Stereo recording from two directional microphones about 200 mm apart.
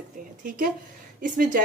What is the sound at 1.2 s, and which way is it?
Speech, 40° right (ahead or behind).